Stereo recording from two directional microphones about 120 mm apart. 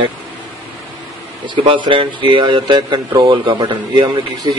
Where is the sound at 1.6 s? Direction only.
45° right (ahead or behind).